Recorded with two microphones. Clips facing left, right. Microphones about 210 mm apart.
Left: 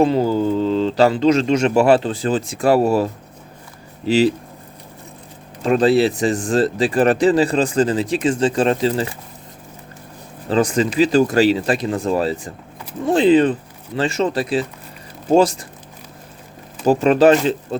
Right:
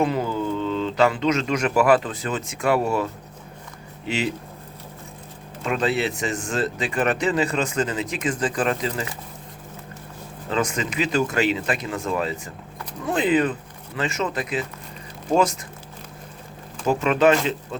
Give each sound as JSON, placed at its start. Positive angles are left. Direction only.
{"t": 0.0, "sound": "speech", "side_deg": 30}
{"t": 5.6, "sound": "speech", "side_deg": 35}
{"t": 10.5, "sound": "speech", "side_deg": 35}
{"t": 16.8, "sound": "speech", "side_deg": 35}